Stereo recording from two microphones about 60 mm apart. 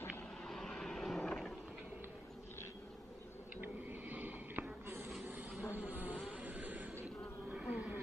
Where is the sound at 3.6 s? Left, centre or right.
Right.